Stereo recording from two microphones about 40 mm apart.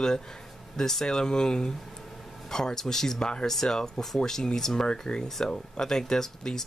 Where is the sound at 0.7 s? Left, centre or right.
Centre.